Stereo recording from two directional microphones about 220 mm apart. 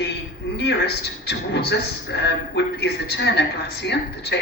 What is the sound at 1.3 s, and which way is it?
A woman's voice, 50° left (ahead or behind).